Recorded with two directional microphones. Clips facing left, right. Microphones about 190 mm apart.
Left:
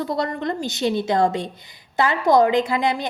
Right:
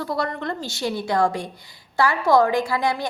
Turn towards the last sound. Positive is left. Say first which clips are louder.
# left 2 dB
turn(degrees=20)  # may be behind; listen again after turning